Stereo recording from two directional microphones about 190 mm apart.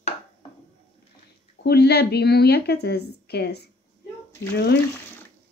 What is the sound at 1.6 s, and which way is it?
A woman's voice, 60° left (ahead or behind).